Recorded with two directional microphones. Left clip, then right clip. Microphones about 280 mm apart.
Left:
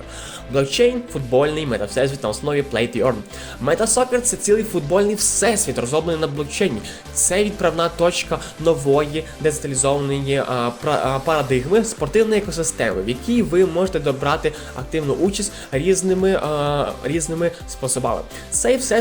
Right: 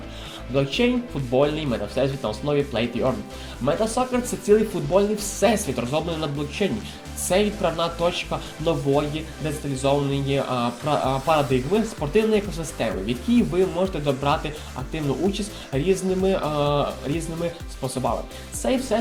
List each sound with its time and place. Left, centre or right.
0.5 s speech: left